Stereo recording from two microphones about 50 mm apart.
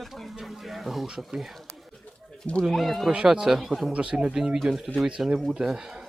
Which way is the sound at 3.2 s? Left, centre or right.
Centre.